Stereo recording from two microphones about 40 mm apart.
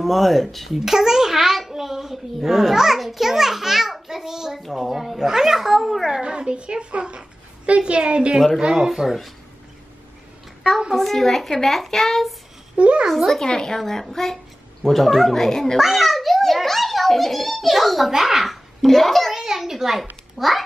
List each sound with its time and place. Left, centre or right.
0.0 s speech: centre
0.8 s a child's voice: centre
6.2 s a child's voice: right
8.7 s speech: centre
11.0 s speech: centre
12.7 s a child's voice: right
13.1 s speech: centre
13.4 s a child's voice: centre
15.8 s a child's voice: centre
19.3 s a child's voice: centre